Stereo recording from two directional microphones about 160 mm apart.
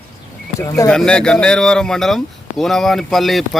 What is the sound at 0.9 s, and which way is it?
Speech, 5° left (ahead or behind).